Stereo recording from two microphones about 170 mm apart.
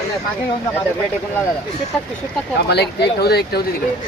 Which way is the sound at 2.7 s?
75° left (ahead or behind).